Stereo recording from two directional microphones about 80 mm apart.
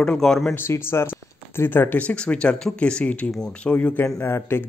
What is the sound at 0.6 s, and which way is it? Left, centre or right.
A man's voice, left.